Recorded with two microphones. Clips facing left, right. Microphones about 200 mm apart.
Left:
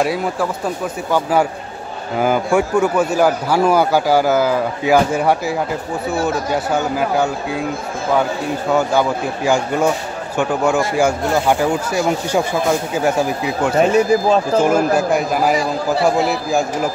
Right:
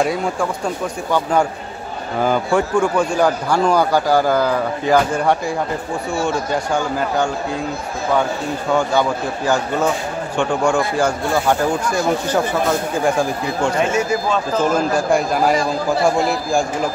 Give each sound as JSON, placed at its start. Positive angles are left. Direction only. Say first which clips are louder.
{"t": 0.0, "sound": "a man's voice", "louder": "left 1 dB", "side_deg": 5}
{"t": 8.7, "sound": "a man's voice", "louder": "left 1 dB", "side_deg": 10}
{"t": 13.7, "sound": "speech", "louder": "left 9 dB", "side_deg": 35}
{"t": 14.6, "sound": "a man's voice", "louder": "left 3 dB", "side_deg": 10}